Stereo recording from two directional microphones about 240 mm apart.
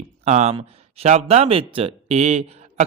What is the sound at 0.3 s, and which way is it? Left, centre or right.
Speech, right.